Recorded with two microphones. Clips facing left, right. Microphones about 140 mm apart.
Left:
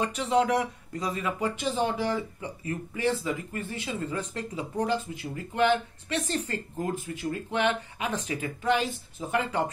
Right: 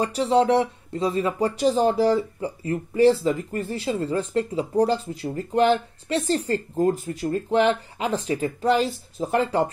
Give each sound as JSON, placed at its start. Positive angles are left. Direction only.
{"t": 0.0, "sound": "speech", "side_deg": -35}